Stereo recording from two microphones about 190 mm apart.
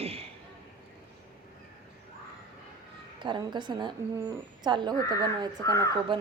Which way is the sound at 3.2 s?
25° right (ahead or behind).